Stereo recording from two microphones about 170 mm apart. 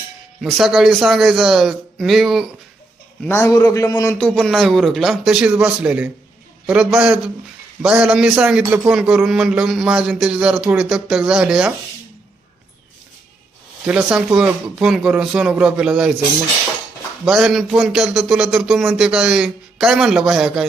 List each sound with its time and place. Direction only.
0.4 s a man's voice: centre (ahead or behind)
3.2 s a man's voice: 15° left (ahead or behind)
4.3 s a man's voice: centre (ahead or behind)
13.8 s a man's voice: 5° right (ahead or behind)
17.2 s a man's voice: centre (ahead or behind)